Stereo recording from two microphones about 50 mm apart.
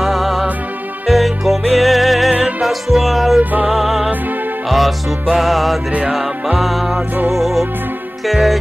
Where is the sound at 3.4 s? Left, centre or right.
Right.